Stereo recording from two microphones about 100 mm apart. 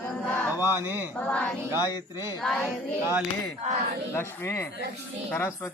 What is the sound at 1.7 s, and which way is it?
Speech, 40° left (ahead or behind).